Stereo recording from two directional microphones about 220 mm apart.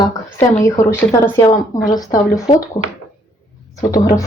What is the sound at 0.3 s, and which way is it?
Speech, 10° left (ahead or behind).